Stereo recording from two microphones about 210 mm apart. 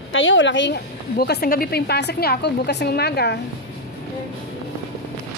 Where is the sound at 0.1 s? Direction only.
65° left (ahead or behind).